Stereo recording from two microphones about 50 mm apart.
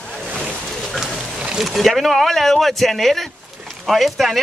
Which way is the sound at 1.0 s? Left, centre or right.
Centre.